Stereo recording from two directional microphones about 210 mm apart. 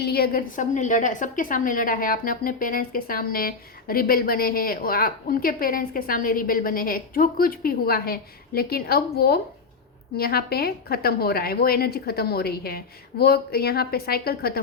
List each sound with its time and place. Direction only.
0.0 s a woman's voice: 50° left (ahead or behind)